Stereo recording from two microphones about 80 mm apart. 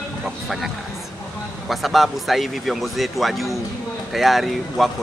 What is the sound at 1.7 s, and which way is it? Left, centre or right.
Speech, centre.